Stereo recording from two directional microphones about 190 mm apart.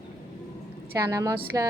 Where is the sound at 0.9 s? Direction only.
15° right (ahead or behind).